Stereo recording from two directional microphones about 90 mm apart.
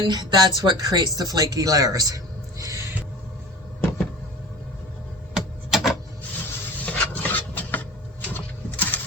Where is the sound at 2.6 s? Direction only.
35° right (ahead or behind).